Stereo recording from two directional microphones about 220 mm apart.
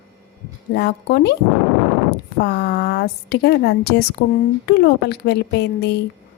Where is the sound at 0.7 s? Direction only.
50° left (ahead or behind).